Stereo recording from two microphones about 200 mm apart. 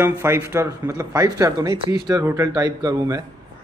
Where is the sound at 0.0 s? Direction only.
10° right (ahead or behind).